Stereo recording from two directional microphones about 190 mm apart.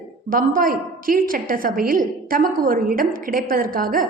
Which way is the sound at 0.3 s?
45° right (ahead or behind).